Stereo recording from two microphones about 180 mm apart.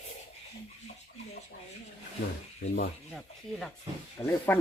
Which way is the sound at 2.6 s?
50° left (ahead or behind).